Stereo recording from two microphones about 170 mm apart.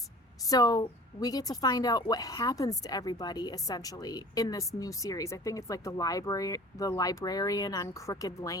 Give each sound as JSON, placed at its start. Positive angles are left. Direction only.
{"t": 0.4, "sound": "a woman's voice", "side_deg": 20}